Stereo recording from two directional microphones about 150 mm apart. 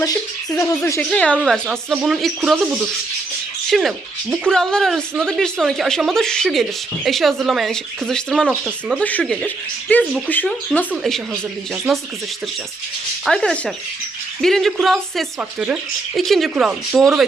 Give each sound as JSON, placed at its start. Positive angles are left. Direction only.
{"t": 0.0, "sound": "speech", "side_deg": 20}
{"t": 1.1, "sound": "speech", "side_deg": 5}
{"t": 3.7, "sound": "speech", "side_deg": 0}
{"t": 10.9, "sound": "speech", "side_deg": 0}
{"t": 13.2, "sound": "speech", "side_deg": 5}